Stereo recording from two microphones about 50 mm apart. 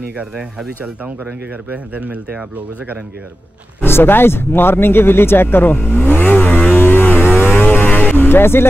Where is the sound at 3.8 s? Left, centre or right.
Left.